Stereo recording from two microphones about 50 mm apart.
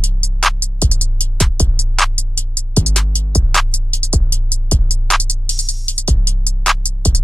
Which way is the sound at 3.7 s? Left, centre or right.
Left.